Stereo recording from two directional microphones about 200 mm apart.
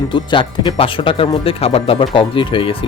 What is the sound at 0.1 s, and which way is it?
Speech, 25° left (ahead or behind).